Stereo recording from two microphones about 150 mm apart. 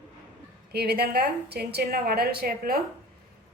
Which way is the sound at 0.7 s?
90° right.